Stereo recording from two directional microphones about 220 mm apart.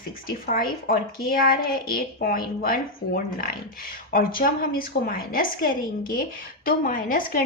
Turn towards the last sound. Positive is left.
turn(degrees=40)  # may be behind; listen again after turning